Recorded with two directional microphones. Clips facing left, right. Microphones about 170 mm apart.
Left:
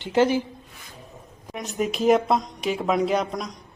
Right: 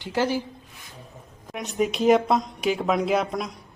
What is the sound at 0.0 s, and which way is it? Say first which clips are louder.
Speech: left 4 dB; 20° left (ahead or behind).